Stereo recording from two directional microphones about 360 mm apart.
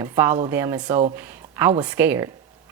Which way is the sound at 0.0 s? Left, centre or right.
Centre.